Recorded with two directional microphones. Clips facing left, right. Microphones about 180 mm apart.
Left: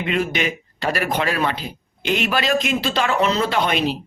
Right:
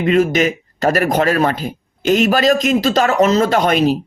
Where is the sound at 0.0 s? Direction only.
45° right (ahead or behind).